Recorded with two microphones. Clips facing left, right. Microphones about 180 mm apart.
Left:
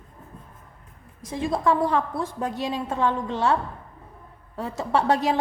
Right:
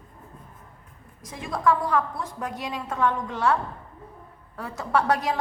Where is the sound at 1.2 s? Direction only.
30° left (ahead or behind).